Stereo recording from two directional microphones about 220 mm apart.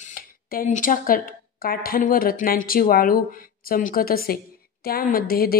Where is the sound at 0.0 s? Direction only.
40° left (ahead or behind).